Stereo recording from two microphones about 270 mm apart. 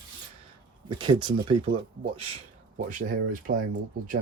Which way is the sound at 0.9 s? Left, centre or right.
Centre.